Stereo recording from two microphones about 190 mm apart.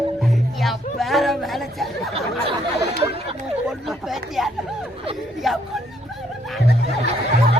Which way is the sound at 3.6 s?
Centre (ahead or behind).